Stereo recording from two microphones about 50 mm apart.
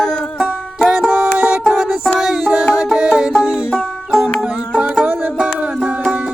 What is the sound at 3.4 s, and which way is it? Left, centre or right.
Banjo, centre.